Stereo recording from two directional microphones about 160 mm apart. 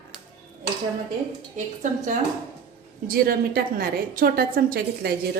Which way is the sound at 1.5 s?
50° right (ahead or behind).